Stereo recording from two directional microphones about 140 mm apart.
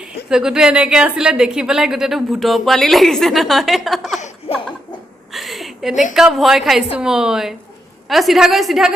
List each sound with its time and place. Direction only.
0.0 s a woman's voice: 5° right (ahead or behind)
4.5 s laughter: 45° left (ahead or behind)
5.3 s a sound: centre (ahead or behind)
6.1 s a woman's voice: centre (ahead or behind)